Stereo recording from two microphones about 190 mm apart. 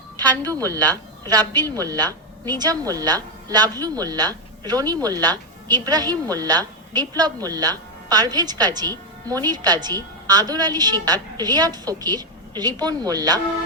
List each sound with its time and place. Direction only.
0.8 s speech: 10° left (ahead or behind)
1.3 s a woman's voice: 20° right (ahead or behind)